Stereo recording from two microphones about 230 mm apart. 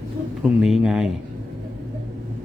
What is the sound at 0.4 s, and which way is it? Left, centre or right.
Speech, centre.